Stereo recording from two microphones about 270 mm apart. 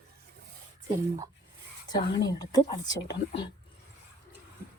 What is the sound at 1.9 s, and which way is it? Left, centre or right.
Speech, centre.